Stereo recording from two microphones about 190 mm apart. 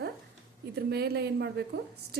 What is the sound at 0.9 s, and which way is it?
Speech, 55° right (ahead or behind).